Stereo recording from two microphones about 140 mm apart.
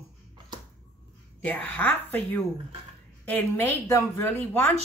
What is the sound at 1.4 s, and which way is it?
Speech, 10° left (ahead or behind).